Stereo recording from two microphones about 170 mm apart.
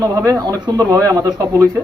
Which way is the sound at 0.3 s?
20° right (ahead or behind).